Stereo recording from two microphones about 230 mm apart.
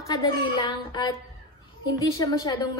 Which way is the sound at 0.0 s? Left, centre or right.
Centre.